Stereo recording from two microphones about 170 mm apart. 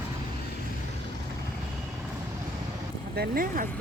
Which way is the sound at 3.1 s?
65° right (ahead or behind).